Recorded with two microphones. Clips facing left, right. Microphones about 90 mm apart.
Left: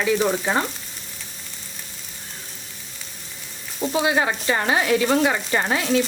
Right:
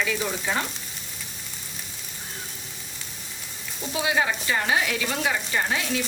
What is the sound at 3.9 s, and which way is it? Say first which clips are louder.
Sizzle: left 3 dB; 40° left (ahead or behind).